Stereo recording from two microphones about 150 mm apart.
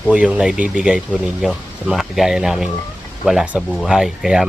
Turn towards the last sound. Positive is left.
turn(degrees=-5)  # may be behind; listen again after turning